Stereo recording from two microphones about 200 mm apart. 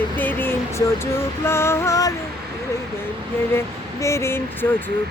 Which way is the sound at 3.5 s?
15° left (ahead or behind).